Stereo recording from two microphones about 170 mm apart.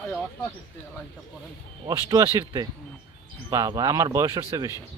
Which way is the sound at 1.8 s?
20° right (ahead or behind).